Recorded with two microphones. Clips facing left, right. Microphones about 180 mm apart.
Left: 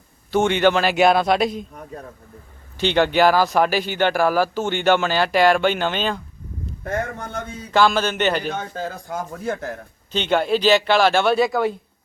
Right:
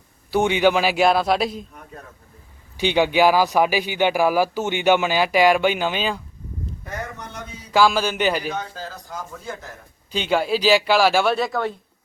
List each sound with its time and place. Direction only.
0.3 s a man's voice: 10° right (ahead or behind)
2.7 s speech: 10° right (ahead or behind)
6.8 s speech: 50° left (ahead or behind)
7.7 s speech: 5° right (ahead or behind)
8.4 s speech: 55° left (ahead or behind)
10.1 s a man's voice: 5° right (ahead or behind)